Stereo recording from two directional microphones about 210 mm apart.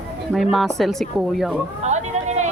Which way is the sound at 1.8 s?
35° right (ahead or behind).